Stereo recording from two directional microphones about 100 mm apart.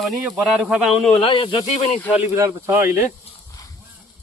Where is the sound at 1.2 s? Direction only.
60° left (ahead or behind); by 2.0 s 80° left.